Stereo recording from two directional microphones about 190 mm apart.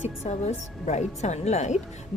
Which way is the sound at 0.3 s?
35° left (ahead or behind).